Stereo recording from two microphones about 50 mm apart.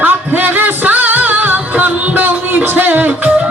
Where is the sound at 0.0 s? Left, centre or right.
Right.